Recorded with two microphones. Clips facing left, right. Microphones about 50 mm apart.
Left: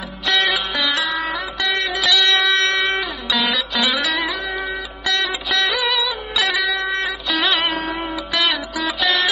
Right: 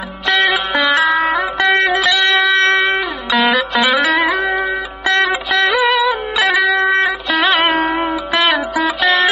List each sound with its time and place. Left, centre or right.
0.3 s music: centre
0.7 s music: right
2.3 s music: centre
2.6 s music: right
3.4 s music: right
6.3 s music: centre
6.6 s music: right
8.1 s music: right